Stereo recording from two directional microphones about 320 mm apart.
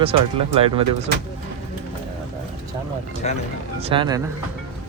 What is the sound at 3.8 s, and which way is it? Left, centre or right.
Speech, centre.